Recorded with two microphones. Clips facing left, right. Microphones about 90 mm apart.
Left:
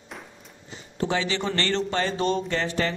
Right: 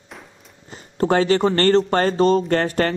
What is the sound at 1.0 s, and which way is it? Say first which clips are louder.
Speech: right 9 dB; 45° right (ahead or behind).